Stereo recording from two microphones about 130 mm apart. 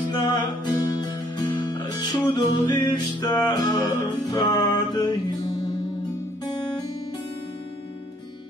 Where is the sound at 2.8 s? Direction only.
30° left (ahead or behind).